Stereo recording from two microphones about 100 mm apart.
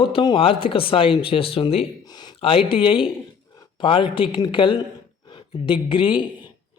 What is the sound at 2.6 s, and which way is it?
A man's voice, 60° left (ahead or behind).